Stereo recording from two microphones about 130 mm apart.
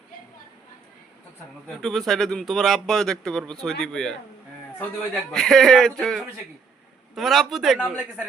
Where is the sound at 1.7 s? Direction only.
Centre (ahead or behind).